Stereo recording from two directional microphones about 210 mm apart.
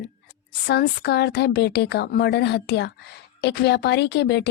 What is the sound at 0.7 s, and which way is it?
A woman's voice, 50° left (ahead or behind).